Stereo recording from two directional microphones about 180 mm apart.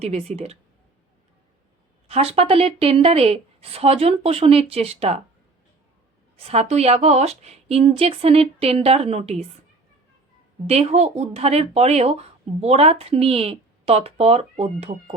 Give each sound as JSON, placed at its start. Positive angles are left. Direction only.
{"t": 0.0, "sound": "speech", "side_deg": -35}
{"t": 2.0, "sound": "speech", "side_deg": -35}
{"t": 6.3, "sound": "speech", "side_deg": -35}
{"t": 10.7, "sound": "speech", "side_deg": -35}